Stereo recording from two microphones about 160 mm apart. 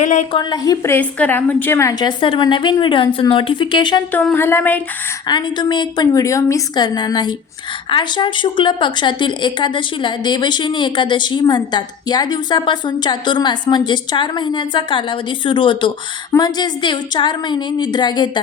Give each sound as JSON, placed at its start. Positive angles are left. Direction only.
{"t": 0.0, "sound": "a woman's voice", "side_deg": 50}
{"t": 0.3, "sound": "speech", "side_deg": 25}
{"t": 4.1, "sound": "speech", "side_deg": 10}
{"t": 5.3, "sound": "speech", "side_deg": 30}